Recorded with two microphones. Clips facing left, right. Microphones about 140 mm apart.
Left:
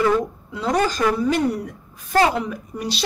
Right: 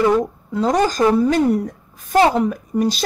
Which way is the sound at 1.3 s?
45° right (ahead or behind).